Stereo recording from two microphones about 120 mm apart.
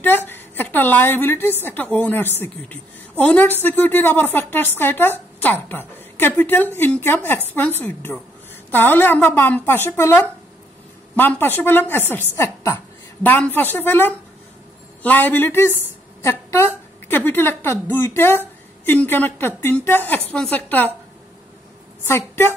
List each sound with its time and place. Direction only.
0.0 s a woman's voice: 15° left (ahead or behind)
22.0 s a woman's voice: 20° left (ahead or behind)